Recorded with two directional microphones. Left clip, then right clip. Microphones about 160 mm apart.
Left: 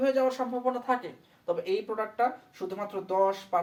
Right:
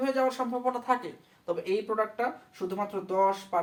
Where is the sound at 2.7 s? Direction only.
15° right (ahead or behind).